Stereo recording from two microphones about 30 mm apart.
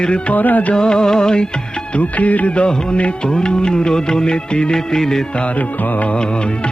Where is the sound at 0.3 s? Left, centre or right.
Left.